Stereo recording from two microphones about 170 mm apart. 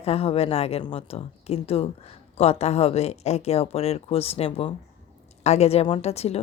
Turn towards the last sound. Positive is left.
turn(degrees=35)  # may be behind; listen again after turning